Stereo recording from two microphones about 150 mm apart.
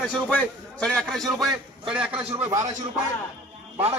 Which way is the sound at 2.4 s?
20° right (ahead or behind).